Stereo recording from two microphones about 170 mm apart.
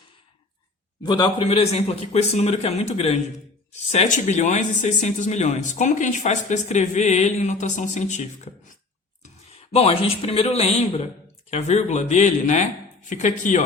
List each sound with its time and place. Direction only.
1.0 s speech: 25° left (ahead or behind); by 13.7 s 45° left (ahead or behind)